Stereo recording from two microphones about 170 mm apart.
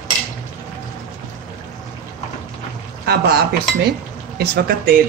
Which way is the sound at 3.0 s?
70° right (ahead or behind).